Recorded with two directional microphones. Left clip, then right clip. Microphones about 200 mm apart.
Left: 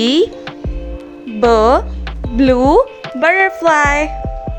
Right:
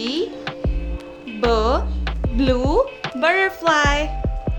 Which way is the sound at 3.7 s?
35° left (ahead or behind).